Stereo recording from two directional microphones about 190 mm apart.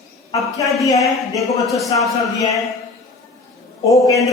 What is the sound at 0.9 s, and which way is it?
Speech, 20° left (ahead or behind).